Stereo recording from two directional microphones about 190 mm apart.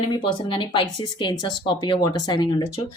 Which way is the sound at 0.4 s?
25° left (ahead or behind).